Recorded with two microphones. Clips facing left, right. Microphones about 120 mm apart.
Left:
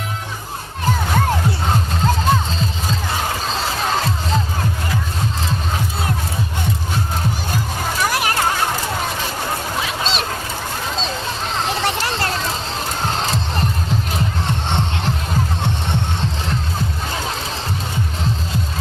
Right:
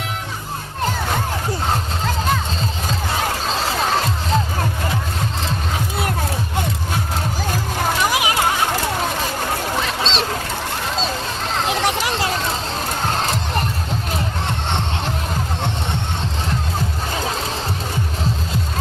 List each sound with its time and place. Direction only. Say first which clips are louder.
8.1 s children playing: right 1 dB; 15° right (ahead or behind)
9.8 s duck: right 1 dB; 5° left (ahead or behind)
11.8 s children playing: right 1 dB; 10° right (ahead or behind)